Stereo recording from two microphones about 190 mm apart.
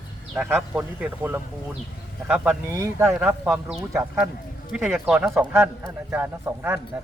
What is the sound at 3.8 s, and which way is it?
A man's voice, 15° right (ahead or behind).